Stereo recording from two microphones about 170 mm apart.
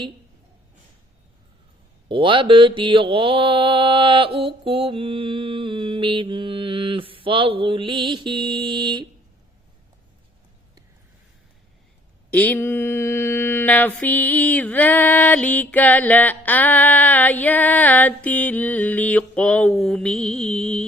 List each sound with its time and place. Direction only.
2.0 s mantra: 30° right (ahead or behind)
12.3 s mantra: 10° left (ahead or behind)